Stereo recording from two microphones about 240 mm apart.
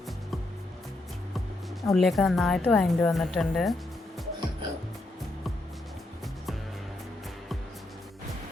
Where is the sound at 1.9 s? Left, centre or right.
Centre.